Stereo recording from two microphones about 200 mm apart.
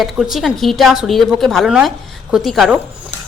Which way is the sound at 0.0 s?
Centre (ahead or behind).